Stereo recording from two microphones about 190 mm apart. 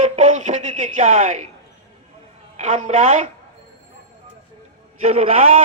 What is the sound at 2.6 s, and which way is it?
Speech, 40° right (ahead or behind).